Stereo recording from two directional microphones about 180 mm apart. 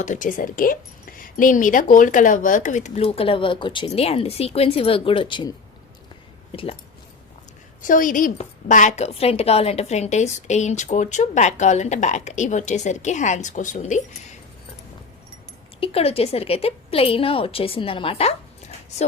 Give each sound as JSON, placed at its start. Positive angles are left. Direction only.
{"t": 0.0, "sound": "a woman's voice", "side_deg": 45}
{"t": 7.8, "sound": "a woman's voice", "side_deg": 50}
{"t": 15.8, "sound": "a woman's voice", "side_deg": 35}